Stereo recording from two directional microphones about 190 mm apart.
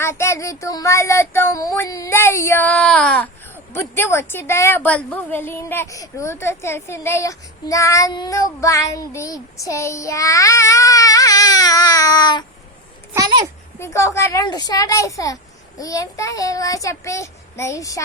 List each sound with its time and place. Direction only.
0.0 s a woman's voice: 15° left (ahead or behind)
13.1 s a child's voice: 15° right (ahead or behind)
13.7 s a woman's voice: 15° left (ahead or behind)